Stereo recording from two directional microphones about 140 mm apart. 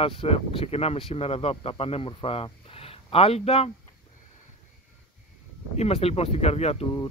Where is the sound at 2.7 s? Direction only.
45° left (ahead or behind).